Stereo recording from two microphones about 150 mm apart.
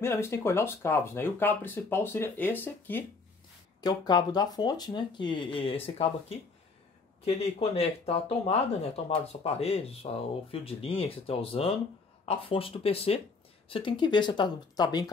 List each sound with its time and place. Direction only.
0.0 s speech: 15° left (ahead or behind)
3.8 s speech: 25° left (ahead or behind)